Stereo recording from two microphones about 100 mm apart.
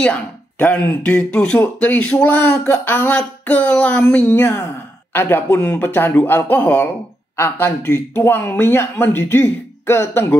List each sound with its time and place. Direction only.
0.0 s speech: 15° left (ahead or behind)
4.3 s speech: 25° left (ahead or behind)